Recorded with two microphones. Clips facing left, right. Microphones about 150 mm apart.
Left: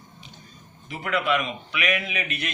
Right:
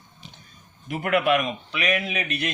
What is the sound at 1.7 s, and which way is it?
Speech, 35° right (ahead or behind).